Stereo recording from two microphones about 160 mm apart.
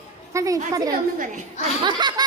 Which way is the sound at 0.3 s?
20° right (ahead or behind).